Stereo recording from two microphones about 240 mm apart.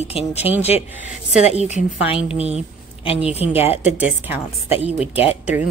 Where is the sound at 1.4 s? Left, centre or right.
Left.